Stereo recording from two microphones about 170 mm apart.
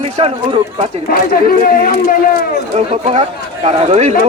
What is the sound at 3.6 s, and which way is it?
Speech, 40° right (ahead or behind).